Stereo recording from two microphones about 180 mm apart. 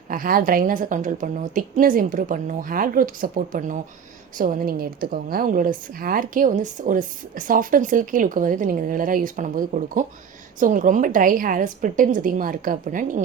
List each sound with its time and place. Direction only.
0.1 s a woman's voice: 50° right (ahead or behind)